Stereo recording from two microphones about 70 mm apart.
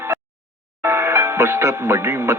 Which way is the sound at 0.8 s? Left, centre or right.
Right.